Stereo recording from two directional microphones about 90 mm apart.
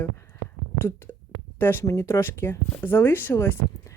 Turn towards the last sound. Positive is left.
turn(degrees=25)  # may be behind; listen again after turning